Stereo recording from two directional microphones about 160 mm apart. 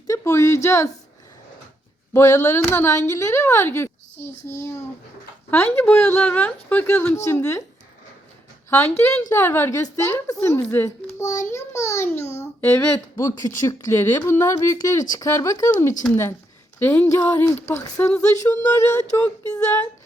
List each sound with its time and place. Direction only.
0.1 s a woman's voice: 15° left (ahead or behind)
2.1 s a woman's voice: 15° left (ahead or behind)
8.7 s a woman's voice: 15° left (ahead or behind)